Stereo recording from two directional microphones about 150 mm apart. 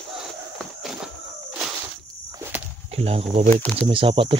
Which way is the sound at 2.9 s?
40° right (ahead or behind).